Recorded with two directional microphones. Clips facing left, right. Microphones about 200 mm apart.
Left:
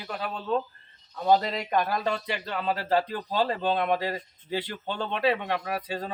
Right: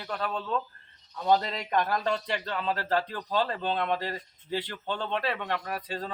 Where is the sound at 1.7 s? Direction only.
5° left (ahead or behind).